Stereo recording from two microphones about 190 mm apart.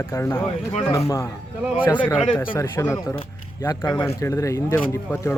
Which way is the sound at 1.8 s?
10° left (ahead or behind).